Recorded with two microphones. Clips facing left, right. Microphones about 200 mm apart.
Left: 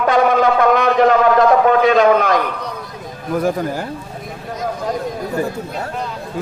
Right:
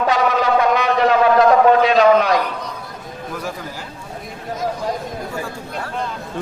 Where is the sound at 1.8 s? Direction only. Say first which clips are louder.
Left 1 dB; 50° left (ahead or behind).